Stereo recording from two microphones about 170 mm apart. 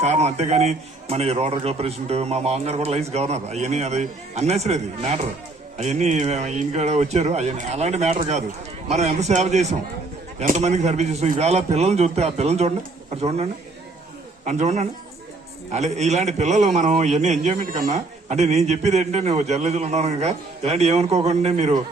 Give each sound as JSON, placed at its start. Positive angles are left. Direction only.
{"t": 0.0, "sound": "a man's voice", "side_deg": -40}